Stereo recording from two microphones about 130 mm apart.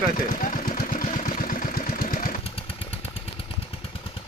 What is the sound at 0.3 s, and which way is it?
Engine, 90° left.